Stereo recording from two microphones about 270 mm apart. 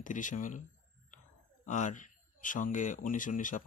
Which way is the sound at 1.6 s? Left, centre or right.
Left.